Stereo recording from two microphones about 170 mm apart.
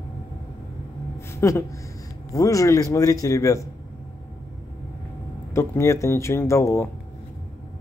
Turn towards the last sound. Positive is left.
turn(degrees=15)  # may be behind; listen again after turning